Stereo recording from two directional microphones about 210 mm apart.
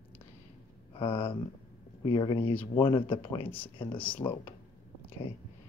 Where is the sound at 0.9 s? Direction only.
25° left (ahead or behind).